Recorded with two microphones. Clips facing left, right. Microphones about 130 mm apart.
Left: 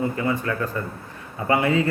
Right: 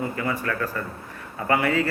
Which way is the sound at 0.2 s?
25° left (ahead or behind).